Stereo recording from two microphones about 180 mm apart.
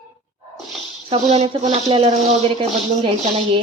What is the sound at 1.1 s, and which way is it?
Cutlery, 35° right (ahead or behind).